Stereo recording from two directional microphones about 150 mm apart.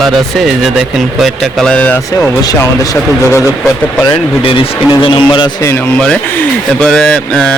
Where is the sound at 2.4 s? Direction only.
20° left (ahead or behind).